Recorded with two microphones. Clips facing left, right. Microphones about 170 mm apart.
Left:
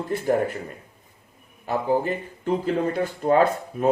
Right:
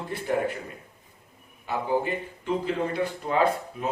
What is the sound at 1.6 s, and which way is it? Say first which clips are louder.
Speech: left 4 dB; 45° left (ahead or behind).